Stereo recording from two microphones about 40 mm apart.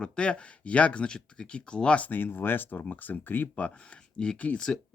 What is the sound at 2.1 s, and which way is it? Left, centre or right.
Speech, left.